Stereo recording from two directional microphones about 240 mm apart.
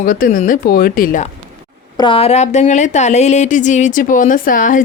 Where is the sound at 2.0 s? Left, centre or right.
Left.